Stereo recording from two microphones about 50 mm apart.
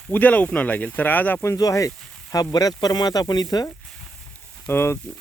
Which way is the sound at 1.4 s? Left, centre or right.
Left.